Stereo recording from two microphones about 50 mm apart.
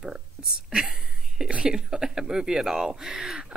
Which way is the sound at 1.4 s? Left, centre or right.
Centre.